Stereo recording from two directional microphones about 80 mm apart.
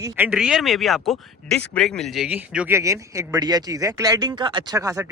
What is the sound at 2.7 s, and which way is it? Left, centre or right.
Speech, right.